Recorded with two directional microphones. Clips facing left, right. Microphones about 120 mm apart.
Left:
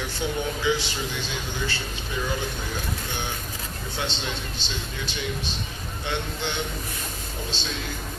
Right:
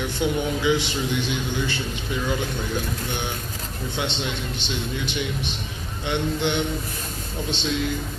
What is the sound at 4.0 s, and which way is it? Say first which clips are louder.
Speech: right 3 dB; 20° right (ahead or behind).